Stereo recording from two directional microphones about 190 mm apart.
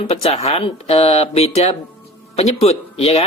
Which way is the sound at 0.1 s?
35° left (ahead or behind).